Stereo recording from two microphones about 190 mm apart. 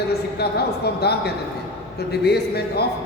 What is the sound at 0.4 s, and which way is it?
A woman's voice, 55° left (ahead or behind).